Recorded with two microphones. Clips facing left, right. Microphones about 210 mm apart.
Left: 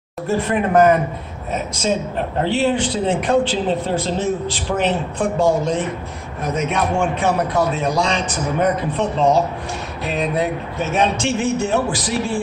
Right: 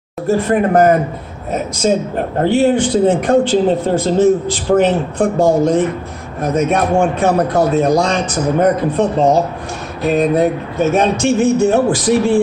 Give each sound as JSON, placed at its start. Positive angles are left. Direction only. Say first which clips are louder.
{"t": 0.5, "sound": "a man's voice", "louder": "right 2 dB", "side_deg": -40}
{"t": 2.1, "sound": "a man's voice", "louder": "right 6 dB", "side_deg": -50}